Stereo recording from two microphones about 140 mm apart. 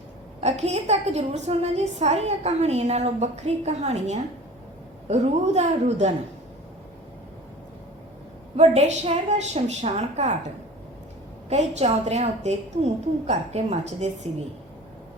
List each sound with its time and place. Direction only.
0.4 s a woman's voice: 50° right (ahead or behind)
8.5 s a woman's voice: 55° right (ahead or behind)
11.4 s a woman's voice: 50° right (ahead or behind)